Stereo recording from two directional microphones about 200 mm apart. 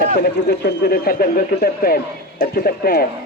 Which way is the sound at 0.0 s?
55° left (ahead or behind).